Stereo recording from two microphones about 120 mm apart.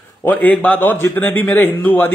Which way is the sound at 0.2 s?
15° left (ahead or behind).